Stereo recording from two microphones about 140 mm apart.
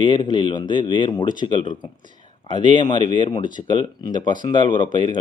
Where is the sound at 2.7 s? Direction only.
35° left (ahead or behind).